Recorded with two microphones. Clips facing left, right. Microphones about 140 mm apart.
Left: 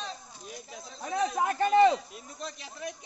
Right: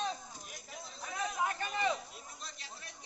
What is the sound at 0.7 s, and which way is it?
Speech, 90° left.